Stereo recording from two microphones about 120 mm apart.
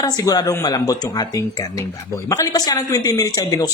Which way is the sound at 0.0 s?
30° left (ahead or behind).